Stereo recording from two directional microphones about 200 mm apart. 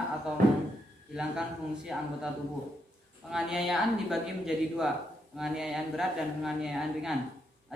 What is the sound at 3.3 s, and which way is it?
Speech, 5° right (ahead or behind).